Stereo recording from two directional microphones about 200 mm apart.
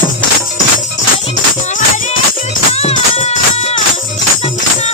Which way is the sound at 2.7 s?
30° left (ahead or behind).